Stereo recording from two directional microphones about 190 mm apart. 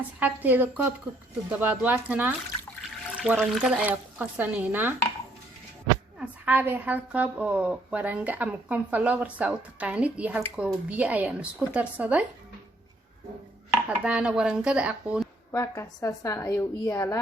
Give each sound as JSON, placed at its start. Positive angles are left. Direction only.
{"t": 0.2, "sound": "a woman's voice", "side_deg": -10}
{"t": 6.1, "sound": "a woman's voice", "side_deg": -10}
{"t": 13.8, "sound": "speech", "side_deg": -5}
{"t": 15.5, "sound": "a woman's voice", "side_deg": 15}